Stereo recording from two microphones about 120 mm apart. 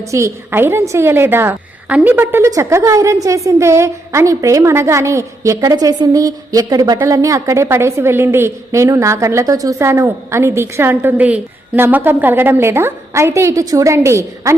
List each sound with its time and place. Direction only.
0.1 s a woman's voice: 20° right (ahead or behind)